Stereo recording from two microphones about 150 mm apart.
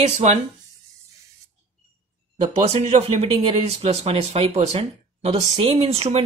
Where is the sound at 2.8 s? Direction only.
45° right (ahead or behind).